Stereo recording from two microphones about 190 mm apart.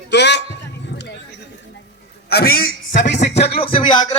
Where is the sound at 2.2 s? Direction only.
55° left (ahead or behind).